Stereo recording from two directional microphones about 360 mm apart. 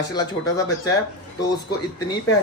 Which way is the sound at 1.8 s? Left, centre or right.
Centre.